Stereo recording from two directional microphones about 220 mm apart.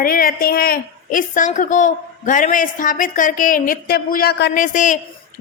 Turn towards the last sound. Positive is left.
turn(degrees=35)  # may be behind; listen again after turning